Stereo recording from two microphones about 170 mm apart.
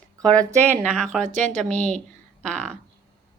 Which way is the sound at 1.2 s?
45° right (ahead or behind).